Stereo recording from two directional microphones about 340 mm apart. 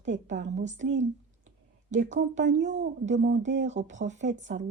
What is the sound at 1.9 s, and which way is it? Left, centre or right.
Speech, right.